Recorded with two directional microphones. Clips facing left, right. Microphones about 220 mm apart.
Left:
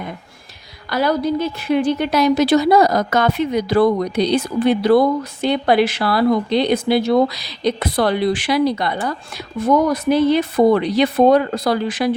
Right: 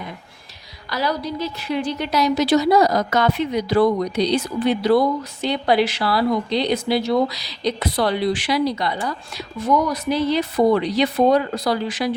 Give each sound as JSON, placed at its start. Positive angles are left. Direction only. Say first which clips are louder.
{"t": 0.9, "sound": "a woman's voice", "louder": "left 6 dB", "side_deg": 50}